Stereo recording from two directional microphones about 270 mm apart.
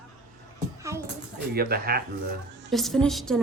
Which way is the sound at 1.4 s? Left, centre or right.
Right.